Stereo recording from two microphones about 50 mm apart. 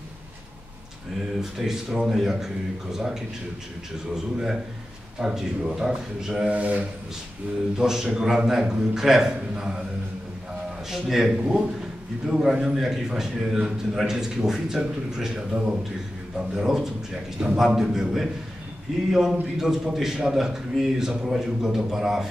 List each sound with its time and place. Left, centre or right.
1.4 s a man's voice: centre
6.5 s speech: right
7.7 s a man's voice: centre
10.9 s a man's voice: centre